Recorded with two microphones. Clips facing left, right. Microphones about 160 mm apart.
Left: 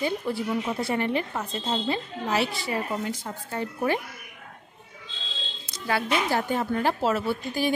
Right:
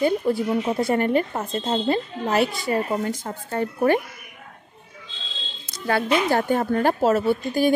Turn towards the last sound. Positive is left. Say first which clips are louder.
# right 6 dB
turn(degrees=-45)  # may be behind; listen again after turning